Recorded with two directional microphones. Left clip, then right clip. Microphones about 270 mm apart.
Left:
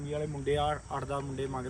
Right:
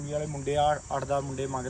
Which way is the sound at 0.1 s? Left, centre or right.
Centre.